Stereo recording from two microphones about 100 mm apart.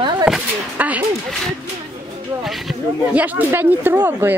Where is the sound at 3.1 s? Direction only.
15° right (ahead or behind).